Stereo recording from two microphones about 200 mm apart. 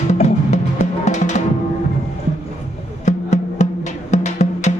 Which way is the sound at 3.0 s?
35° left (ahead or behind).